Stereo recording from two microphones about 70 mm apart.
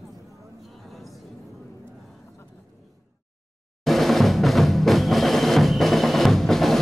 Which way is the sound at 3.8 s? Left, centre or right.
Centre.